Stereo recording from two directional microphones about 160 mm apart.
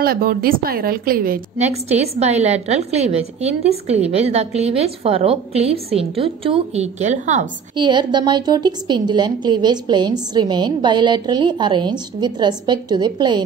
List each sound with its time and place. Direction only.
0.0 s a woman's voice: 70° right (ahead or behind)
1.6 s a woman's voice: 40° right (ahead or behind)
7.7 s a woman's voice: 30° right (ahead or behind)